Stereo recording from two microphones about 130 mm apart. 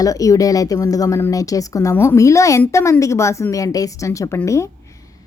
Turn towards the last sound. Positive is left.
turn(degrees=20)  # may be behind; listen again after turning